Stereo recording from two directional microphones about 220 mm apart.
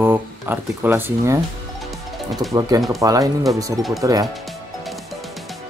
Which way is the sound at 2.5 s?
15° right (ahead or behind).